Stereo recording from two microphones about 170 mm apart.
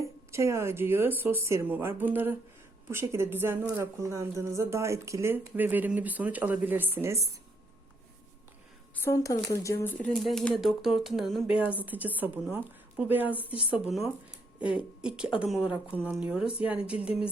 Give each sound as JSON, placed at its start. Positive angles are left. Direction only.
{"t": 0.0, "sound": "speech", "side_deg": -15}
{"t": 9.0, "sound": "speech", "side_deg": 15}